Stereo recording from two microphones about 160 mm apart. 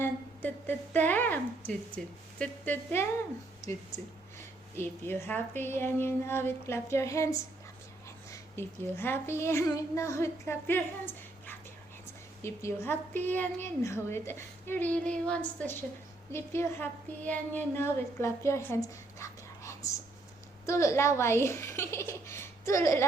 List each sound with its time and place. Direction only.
0.0 s a woman's voice: 10° left (ahead or behind)